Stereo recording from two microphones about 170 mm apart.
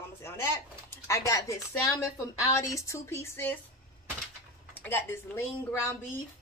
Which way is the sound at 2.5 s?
20° left (ahead or behind).